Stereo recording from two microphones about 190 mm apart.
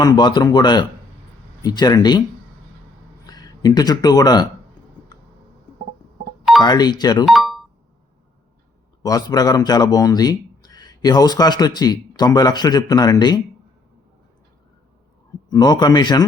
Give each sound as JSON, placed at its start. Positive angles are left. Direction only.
{"t": 0.0, "sound": "speech", "side_deg": 20}
{"t": 3.2, "sound": "speech", "side_deg": 20}
{"t": 6.6, "sound": "speech", "side_deg": 20}
{"t": 7.3, "sound": "a sound", "side_deg": 0}
{"t": 9.0, "sound": "speech", "side_deg": 20}
{"t": 15.4, "sound": "speech", "side_deg": 20}